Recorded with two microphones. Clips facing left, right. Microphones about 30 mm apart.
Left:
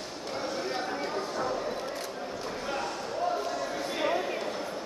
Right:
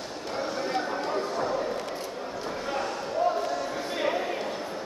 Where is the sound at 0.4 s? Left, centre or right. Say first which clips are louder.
Right 4 dB; centre.